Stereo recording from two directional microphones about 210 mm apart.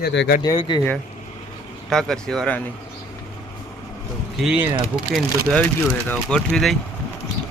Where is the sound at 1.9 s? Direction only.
Centre (ahead or behind).